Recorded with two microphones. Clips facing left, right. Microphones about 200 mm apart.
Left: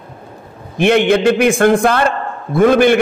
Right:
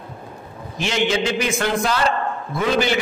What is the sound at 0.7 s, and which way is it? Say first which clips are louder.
A man's voice: left 9 dB; 60° left (ahead or behind).